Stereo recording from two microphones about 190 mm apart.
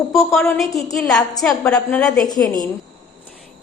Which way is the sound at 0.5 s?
Centre (ahead or behind).